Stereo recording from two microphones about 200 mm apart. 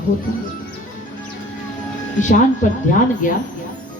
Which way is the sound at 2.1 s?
40° left (ahead or behind).